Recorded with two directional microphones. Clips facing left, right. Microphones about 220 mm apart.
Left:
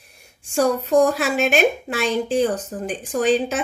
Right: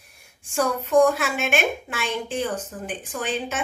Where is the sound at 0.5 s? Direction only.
35° left (ahead or behind).